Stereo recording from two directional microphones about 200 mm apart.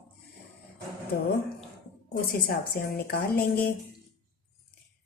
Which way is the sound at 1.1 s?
50° left (ahead or behind).